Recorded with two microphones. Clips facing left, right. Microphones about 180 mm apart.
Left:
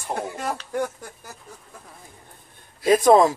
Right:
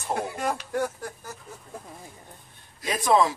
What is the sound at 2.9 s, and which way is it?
Speech, 45° left (ahead or behind).